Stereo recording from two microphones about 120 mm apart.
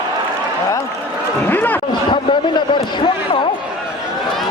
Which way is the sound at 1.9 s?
45° left (ahead or behind).